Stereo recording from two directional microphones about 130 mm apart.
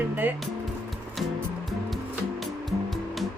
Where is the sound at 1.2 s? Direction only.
Centre (ahead or behind).